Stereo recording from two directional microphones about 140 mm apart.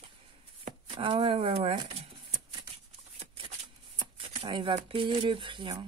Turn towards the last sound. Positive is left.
turn(degrees=-35)  # may be behind; listen again after turning